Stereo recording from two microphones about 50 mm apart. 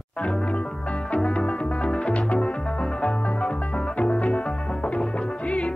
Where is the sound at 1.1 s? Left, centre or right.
Left.